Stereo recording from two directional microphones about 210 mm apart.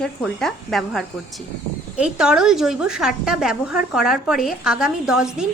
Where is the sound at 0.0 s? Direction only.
Centre (ahead or behind).